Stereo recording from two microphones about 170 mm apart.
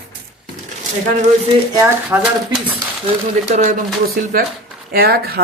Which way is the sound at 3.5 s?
45° right (ahead or behind).